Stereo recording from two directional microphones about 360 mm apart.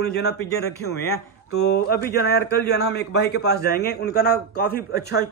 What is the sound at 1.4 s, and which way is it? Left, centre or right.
Speech, left.